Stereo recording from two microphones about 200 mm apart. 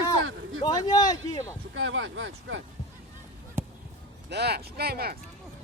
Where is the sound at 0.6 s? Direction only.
20° left (ahead or behind).